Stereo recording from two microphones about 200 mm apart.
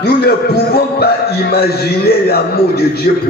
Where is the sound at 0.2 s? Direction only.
50° left (ahead or behind).